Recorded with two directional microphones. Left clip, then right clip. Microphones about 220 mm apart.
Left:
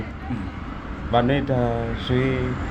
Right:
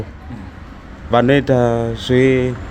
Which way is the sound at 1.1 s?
50° right (ahead or behind).